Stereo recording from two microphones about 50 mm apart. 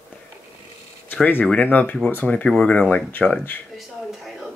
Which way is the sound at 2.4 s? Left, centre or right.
Centre.